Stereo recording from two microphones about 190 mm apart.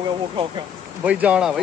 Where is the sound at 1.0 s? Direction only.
5° right (ahead or behind).